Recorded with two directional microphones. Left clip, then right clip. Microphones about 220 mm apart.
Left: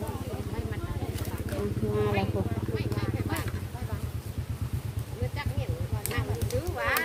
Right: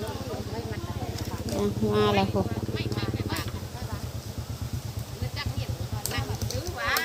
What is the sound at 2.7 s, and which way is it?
Vehicle, 30° left (ahead or behind).